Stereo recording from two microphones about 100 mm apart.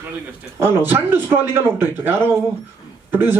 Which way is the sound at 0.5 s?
20° right (ahead or behind).